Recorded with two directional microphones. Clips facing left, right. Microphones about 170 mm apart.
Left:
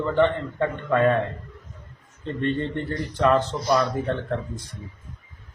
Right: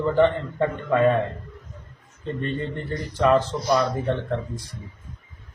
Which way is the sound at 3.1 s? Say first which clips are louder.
Right 1 dB; centre (ahead or behind).